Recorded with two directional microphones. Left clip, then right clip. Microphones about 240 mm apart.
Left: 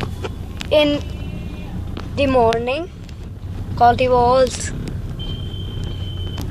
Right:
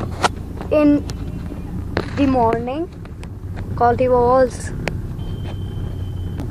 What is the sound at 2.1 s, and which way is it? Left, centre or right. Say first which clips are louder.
Speech: left 2 dB; centre.